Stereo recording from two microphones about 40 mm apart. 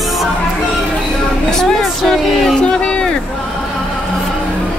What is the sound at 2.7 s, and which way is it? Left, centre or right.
Speech, left.